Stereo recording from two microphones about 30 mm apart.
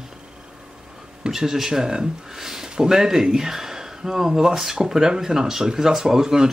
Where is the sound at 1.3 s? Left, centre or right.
Centre.